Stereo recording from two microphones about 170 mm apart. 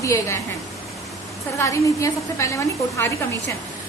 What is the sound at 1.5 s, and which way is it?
A woman's voice, 20° left (ahead or behind).